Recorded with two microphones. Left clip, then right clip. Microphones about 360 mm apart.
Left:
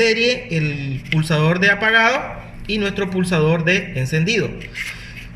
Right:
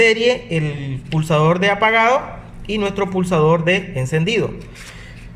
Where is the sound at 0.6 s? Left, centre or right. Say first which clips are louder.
Left 1 dB; centre.